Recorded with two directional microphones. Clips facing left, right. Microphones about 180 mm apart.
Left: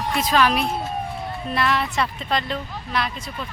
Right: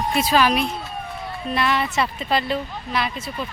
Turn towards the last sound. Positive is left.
turn(degrees=-5)  # may be behind; listen again after turning